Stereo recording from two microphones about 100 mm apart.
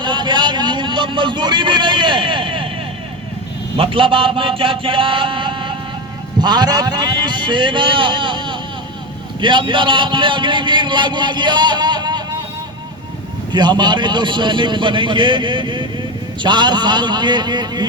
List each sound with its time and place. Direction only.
0.0 s vehicle: 50° right (ahead or behind)
3.8 s a man's voice: 60° right (ahead or behind)
13.5 s a man's voice: 45° right (ahead or behind)